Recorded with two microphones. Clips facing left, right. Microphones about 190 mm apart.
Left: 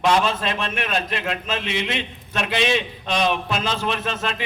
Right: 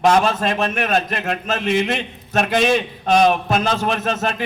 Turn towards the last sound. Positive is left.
turn(degrees=-45)  # may be behind; listen again after turning